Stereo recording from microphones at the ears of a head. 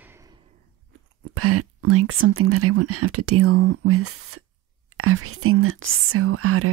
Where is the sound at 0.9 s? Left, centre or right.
Right.